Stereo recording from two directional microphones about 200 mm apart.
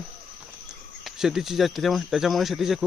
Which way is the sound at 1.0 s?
Centre (ahead or behind).